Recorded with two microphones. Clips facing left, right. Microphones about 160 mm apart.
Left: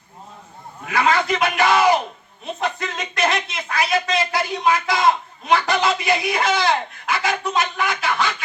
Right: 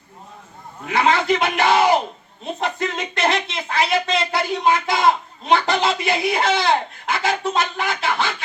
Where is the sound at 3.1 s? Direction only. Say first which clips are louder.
Even; 30° right (ahead or behind).